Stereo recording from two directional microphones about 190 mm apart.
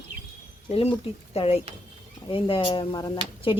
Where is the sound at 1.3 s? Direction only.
30° left (ahead or behind).